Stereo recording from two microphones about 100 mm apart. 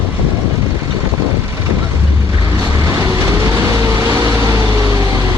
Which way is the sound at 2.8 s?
30° right (ahead or behind).